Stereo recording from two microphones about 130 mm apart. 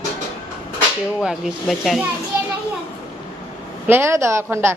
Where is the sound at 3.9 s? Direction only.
20° right (ahead or behind).